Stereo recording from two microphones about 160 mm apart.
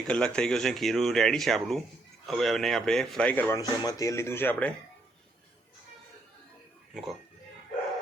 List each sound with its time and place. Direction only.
0.1 s speech: 5° left (ahead or behind)
3.6 s speech: 20° left (ahead or behind)
6.9 s speech: centre (ahead or behind)